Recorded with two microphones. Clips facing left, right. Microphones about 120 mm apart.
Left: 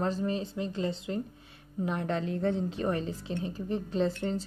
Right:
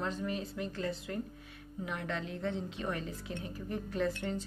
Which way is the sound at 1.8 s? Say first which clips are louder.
Left 7 dB; 35° left (ahead or behind).